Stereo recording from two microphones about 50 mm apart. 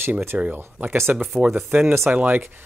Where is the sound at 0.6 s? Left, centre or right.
Right.